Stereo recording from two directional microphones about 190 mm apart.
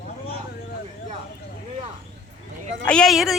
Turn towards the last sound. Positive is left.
turn(degrees=0)  # may be behind; listen again after turning